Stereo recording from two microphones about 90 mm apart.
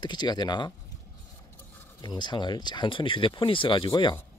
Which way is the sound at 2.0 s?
55° left (ahead or behind).